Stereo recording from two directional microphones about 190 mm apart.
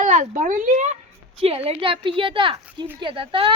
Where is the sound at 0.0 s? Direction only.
40° right (ahead or behind).